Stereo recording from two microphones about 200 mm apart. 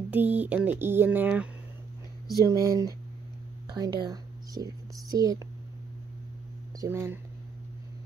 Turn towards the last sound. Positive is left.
turn(degrees=-15)  # may be behind; listen again after turning